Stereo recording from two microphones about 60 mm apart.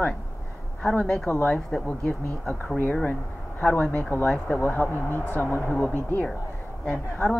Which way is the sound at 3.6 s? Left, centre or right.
Left.